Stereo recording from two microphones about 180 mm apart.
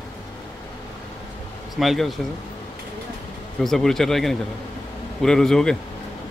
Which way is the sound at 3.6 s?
Centre (ahead or behind).